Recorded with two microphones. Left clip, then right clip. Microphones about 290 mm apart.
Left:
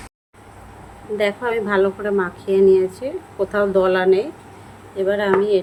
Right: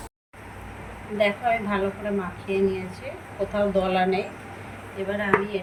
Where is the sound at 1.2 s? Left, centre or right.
Centre.